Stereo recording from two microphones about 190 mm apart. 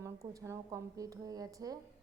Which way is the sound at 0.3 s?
15° right (ahead or behind).